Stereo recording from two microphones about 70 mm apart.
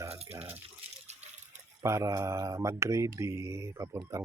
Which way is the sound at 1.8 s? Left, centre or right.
Right.